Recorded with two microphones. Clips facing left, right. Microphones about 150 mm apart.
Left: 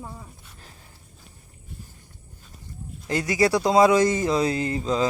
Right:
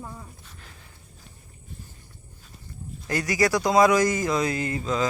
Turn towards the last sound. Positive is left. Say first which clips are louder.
# left 2 dB
turn(degrees=30)  # may be behind; listen again after turning